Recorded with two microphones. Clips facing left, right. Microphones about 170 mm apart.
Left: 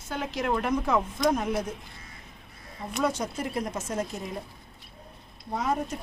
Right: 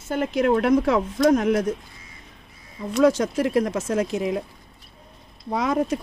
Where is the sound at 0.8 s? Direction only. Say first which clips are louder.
Right 6 dB; 80° right.